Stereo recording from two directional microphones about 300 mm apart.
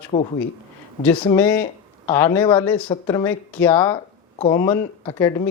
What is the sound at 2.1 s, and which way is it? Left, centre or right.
Speech, centre.